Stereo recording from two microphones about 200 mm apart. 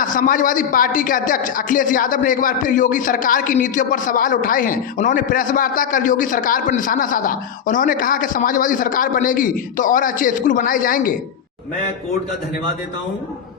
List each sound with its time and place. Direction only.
0.0 s speech: 40° left (ahead or behind)